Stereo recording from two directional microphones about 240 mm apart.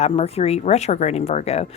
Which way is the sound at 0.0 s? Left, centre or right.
Left.